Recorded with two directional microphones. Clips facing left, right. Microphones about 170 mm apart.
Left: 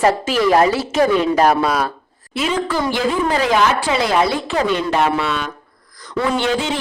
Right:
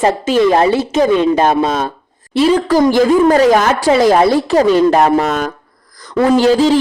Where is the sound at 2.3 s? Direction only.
35° right (ahead or behind).